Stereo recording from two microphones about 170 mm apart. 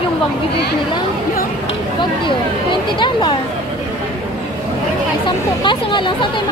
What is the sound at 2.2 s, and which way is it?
Speech, 30° left (ahead or behind).